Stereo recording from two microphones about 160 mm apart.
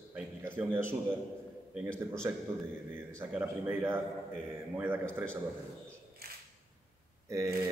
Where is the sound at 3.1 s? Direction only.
10° right (ahead or behind).